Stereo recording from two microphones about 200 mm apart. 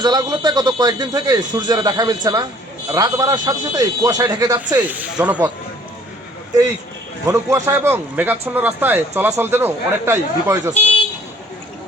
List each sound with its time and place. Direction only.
0.0 s a man's voice: 20° right (ahead or behind)
7.3 s a man's voice: 15° right (ahead or behind)